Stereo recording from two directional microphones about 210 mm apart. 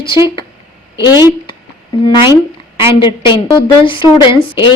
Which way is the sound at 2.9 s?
20° left (ahead or behind).